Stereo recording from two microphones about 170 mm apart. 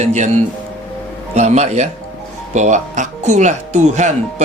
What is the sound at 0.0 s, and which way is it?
Speech, 45° right (ahead or behind).